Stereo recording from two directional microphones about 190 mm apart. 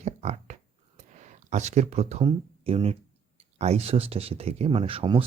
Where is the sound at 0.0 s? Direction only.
35° right (ahead or behind).